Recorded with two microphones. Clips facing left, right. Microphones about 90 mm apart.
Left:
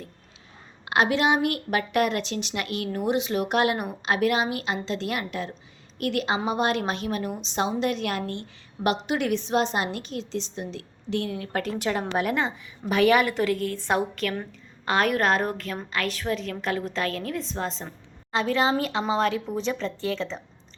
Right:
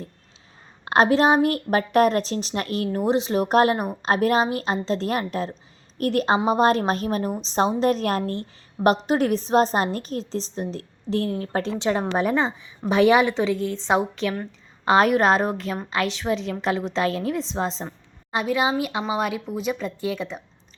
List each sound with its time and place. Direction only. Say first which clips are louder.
0.9 s a woman's voice: right 5 dB; 40° right (ahead or behind); by 14.3 s 20° right (ahead or behind)
14.8 s a woman's voice: right 5 dB; 30° right (ahead or behind)
17.8 s a woman's voice: right 4 dB; 15° right (ahead or behind)